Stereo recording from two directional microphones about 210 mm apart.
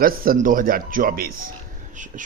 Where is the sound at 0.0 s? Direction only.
45° right (ahead or behind).